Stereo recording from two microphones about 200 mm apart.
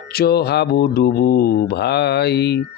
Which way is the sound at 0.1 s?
50° left (ahead or behind).